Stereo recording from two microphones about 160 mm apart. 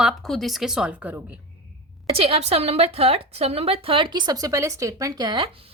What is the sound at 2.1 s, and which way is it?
A woman's voice, 35° right (ahead or behind).